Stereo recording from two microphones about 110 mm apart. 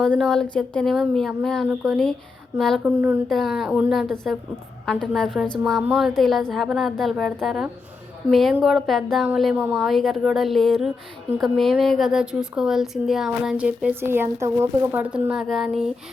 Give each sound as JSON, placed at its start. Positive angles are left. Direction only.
{"t": 0.0, "sound": "a woman's voice", "side_deg": 5}
{"t": 2.8, "sound": "speech", "side_deg": -15}
{"t": 3.2, "sound": "speech", "side_deg": 0}
{"t": 4.1, "sound": "speech", "side_deg": 5}
{"t": 15.0, "sound": "speech", "side_deg": -10}